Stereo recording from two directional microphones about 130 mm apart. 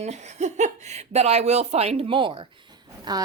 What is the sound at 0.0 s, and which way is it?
Speech, 60° right (ahead or behind).